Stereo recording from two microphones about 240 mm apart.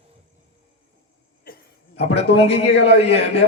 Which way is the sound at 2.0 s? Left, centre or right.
Left.